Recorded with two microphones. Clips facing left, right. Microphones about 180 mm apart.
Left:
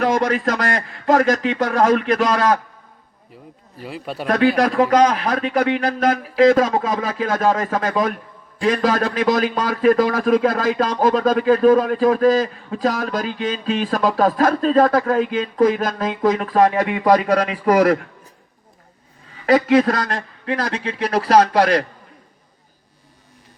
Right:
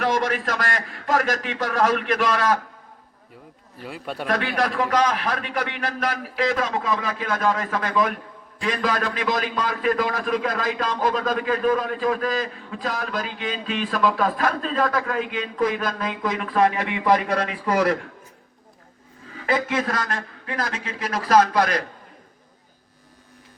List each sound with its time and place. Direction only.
0.0 s a man's voice: 40° left (ahead or behind)
4.0 s speech: 5° left (ahead or behind)
4.3 s a man's voice: 35° left (ahead or behind)
19.7 s a man's voice: 40° left (ahead or behind)